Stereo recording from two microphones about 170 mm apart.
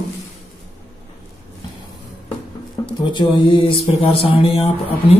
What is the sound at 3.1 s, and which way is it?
Speech, 30° left (ahead or behind).